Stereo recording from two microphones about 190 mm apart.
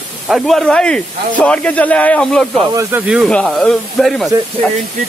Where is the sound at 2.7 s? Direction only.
10° right (ahead or behind).